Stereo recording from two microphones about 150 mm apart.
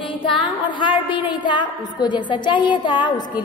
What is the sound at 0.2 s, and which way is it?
A woman's voice, 30° left (ahead or behind).